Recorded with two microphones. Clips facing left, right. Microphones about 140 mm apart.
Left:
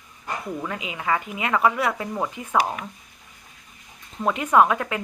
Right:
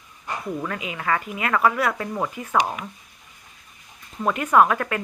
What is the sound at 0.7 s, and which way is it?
A woman's voice, 20° left (ahead or behind).